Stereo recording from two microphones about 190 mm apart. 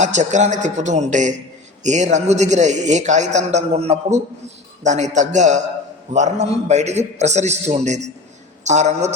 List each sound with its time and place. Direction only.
0.0 s a man's voice: 40° right (ahead or behind)